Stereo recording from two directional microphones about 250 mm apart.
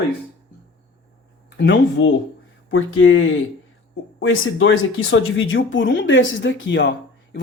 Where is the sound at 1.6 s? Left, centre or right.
Left.